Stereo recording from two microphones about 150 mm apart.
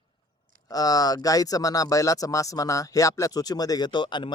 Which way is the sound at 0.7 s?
25° left (ahead or behind).